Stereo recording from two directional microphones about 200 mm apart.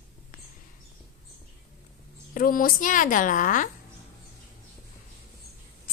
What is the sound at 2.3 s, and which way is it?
A woman's voice, 45° left (ahead or behind).